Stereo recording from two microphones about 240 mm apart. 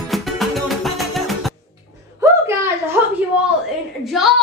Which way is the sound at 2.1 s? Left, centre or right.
Centre.